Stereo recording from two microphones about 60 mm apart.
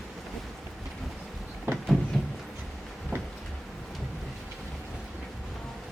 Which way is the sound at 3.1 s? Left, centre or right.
Right.